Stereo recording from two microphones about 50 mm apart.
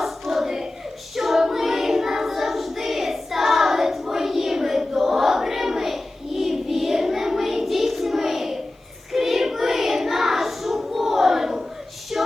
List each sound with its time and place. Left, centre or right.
0.0 s hands: centre
1.1 s child singing: centre
12.1 s a sound: centre